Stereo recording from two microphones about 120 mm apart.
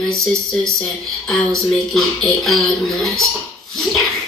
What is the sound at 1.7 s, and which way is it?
Speech, centre (ahead or behind).